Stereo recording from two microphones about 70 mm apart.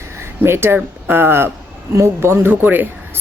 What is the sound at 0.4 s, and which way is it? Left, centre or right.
Speech, right.